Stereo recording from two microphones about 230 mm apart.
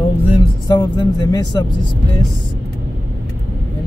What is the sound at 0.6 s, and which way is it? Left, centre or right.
Speech, centre.